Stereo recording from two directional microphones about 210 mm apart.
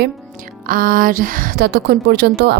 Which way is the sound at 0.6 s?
40° right (ahead or behind).